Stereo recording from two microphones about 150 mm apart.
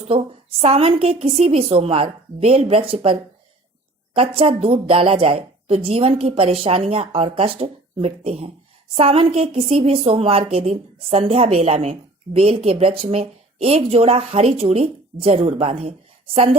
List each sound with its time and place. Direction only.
0.6 s a woman's voice: 40° right (ahead or behind)